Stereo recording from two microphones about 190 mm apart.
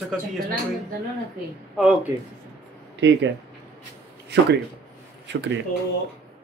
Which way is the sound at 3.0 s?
65° right (ahead or behind).